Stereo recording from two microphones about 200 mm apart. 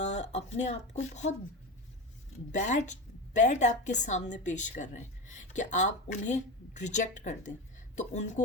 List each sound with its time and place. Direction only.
0.0 s speech: 35° left (ahead or behind)
2.5 s a woman's voice: 35° left (ahead or behind)